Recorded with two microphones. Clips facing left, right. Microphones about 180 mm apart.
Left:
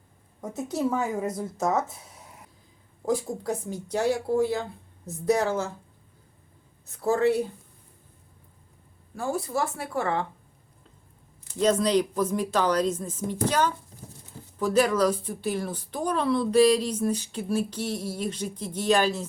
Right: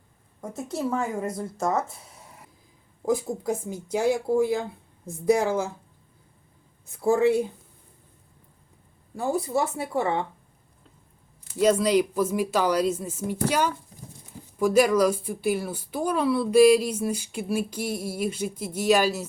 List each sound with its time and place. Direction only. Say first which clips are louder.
0.4 s speech: left 2 dB; centre (ahead or behind)
3.4 s speech: right 2 dB; 10° right (ahead or behind)
7.0 s speech: right 3 dB; 10° right (ahead or behind)
9.9 s speech: right 2 dB; 20° right (ahead or behind)
11.5 s speech: right 2 dB; 10° right (ahead or behind)